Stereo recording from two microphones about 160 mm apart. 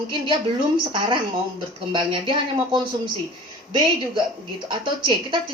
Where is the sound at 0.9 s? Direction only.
30° right (ahead or behind).